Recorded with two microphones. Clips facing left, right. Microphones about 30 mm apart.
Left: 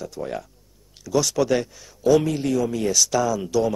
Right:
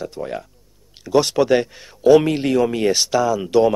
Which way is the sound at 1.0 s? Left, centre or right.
Right.